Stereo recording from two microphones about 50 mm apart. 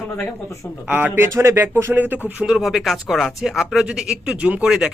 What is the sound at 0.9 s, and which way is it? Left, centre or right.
Speech, right.